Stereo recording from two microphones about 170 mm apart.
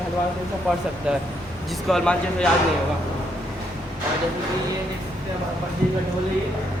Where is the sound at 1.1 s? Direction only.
5° right (ahead or behind).